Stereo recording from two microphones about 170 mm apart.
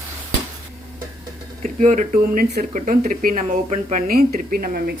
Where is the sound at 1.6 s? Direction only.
45° right (ahead or behind).